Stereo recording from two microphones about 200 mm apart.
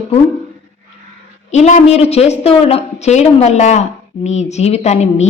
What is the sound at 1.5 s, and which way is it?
A woman's voice, 35° left (ahead or behind).